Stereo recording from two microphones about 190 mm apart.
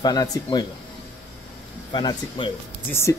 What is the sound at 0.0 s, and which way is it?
Speech, 20° left (ahead or behind).